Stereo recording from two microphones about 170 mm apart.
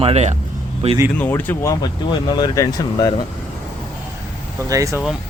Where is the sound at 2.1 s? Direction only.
25° left (ahead or behind).